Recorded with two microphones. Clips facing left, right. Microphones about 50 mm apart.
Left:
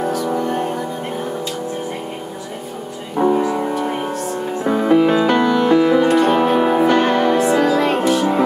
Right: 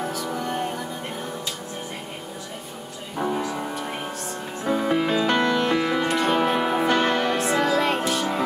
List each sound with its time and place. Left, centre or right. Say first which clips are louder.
0.4 s music: left 7 dB; centre
3.2 s music: left 10 dB; left
4.6 s music: left 8 dB; left
5.4 s music: left 8 dB; centre